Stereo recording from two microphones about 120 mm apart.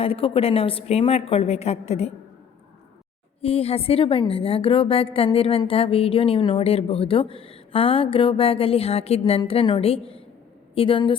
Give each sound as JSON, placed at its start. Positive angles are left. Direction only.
{"t": 0.0, "sound": "a woman's voice", "side_deg": 50}
{"t": 3.4, "sound": "a woman's voice", "side_deg": 50}